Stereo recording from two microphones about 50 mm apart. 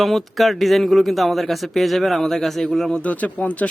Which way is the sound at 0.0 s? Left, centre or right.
Centre.